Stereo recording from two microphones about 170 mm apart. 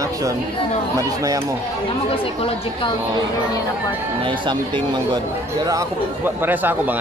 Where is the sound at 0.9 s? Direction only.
20° right (ahead or behind).